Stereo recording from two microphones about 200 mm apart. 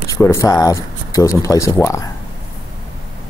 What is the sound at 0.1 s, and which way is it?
Speech, 15° left (ahead or behind).